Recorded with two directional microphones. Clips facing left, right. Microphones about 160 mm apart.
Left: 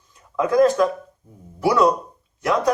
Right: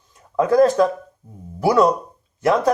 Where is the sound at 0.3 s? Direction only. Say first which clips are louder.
Right 2 dB; 35° right (ahead or behind).